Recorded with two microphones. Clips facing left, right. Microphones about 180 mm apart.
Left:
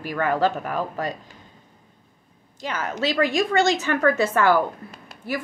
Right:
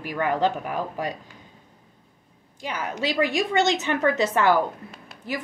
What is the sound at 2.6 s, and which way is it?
A woman's voice, 15° right (ahead or behind).